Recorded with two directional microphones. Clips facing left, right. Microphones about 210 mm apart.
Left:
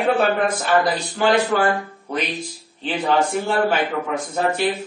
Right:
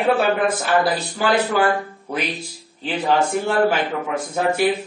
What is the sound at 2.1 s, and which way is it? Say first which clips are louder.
A man's voice: left 1 dB; 5° right (ahead or behind).